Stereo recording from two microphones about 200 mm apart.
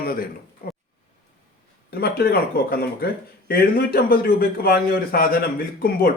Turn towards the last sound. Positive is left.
turn(degrees=50)  # may be behind; listen again after turning